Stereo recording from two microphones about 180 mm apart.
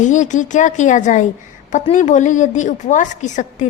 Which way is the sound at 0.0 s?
45° left (ahead or behind).